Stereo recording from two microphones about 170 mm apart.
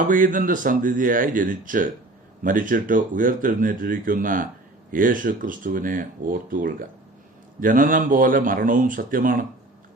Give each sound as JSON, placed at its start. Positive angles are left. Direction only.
{"t": 0.0, "sound": "speech", "side_deg": -50}